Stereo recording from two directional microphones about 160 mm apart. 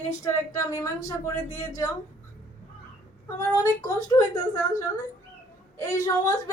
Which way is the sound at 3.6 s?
20° left (ahead or behind).